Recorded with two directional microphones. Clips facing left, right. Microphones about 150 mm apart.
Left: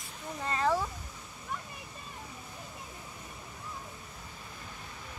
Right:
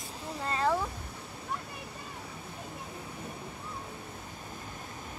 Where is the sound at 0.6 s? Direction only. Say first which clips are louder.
Even; centre (ahead or behind).